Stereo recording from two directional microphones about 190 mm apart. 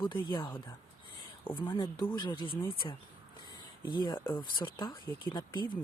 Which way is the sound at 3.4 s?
25° left (ahead or behind).